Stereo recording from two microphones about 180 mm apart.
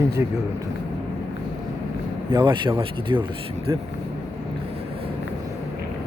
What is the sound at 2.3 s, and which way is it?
Speech, 25° right (ahead or behind).